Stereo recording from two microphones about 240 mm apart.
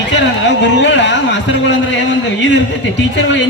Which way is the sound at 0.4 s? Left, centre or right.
Left.